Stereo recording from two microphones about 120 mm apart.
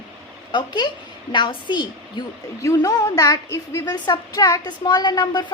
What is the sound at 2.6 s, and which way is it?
A woman's voice, 25° left (ahead or behind).